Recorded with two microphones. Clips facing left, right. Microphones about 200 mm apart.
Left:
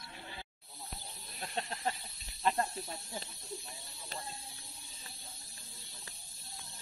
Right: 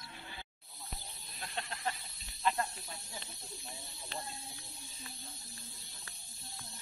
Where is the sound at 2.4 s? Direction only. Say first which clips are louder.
Left 2 dB; 35° left (ahead or behind).